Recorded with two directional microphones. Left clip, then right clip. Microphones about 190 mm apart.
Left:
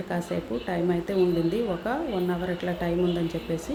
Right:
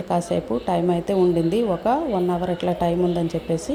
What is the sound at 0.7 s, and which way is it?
A woman's voice, 25° right (ahead or behind).